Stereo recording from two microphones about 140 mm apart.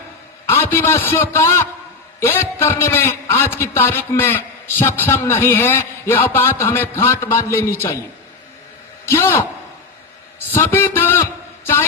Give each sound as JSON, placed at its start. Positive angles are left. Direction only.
{"t": 0.4, "sound": "a man's voice", "side_deg": 15}
{"t": 9.0, "sound": "a man's voice", "side_deg": 20}
{"t": 10.5, "sound": "a man's voice", "side_deg": 15}